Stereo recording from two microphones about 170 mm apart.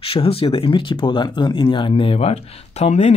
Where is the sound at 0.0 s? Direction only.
35° left (ahead or behind).